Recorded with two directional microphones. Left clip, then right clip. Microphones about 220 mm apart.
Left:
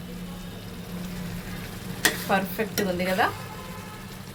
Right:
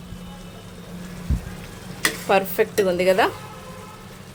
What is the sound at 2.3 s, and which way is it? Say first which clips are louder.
Speech: right 7 dB; 50° right (ahead or behind).